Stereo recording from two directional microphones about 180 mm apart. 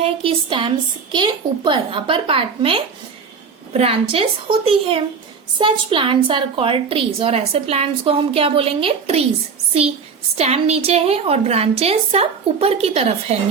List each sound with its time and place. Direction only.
0.0 s a woman's voice: 30° right (ahead or behind)
10.3 s a woman's voice: 35° right (ahead or behind)